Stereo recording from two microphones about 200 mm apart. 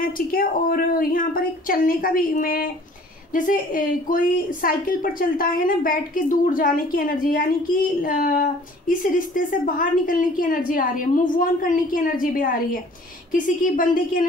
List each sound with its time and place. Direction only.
0.0 s a woman's voice: 45° left (ahead or behind)